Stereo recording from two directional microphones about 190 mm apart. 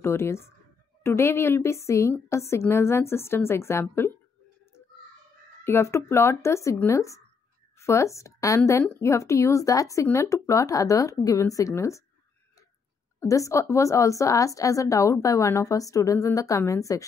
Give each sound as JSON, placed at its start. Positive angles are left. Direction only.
{"t": 0.0, "sound": "a woman's voice", "side_deg": 15}
{"t": 5.6, "sound": "a woman's voice", "side_deg": 15}
{"t": 13.2, "sound": "a woman's voice", "side_deg": 15}